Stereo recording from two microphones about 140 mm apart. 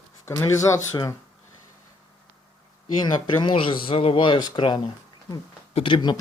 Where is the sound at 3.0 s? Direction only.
35° left (ahead or behind).